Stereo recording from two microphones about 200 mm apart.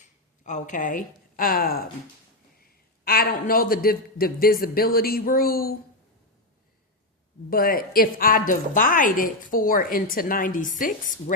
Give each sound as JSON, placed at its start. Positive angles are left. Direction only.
{"t": 0.0, "sound": "a woman's voice", "side_deg": 40}
{"t": 7.5, "sound": "a woman's voice", "side_deg": 45}